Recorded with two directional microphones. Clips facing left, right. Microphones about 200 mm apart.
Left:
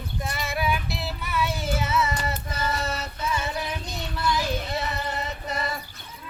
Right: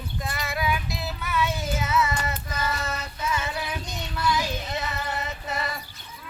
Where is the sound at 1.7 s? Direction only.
30° left (ahead or behind).